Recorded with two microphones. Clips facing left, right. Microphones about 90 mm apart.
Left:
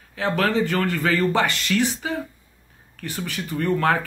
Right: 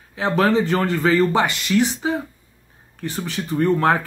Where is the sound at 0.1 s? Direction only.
20° right (ahead or behind).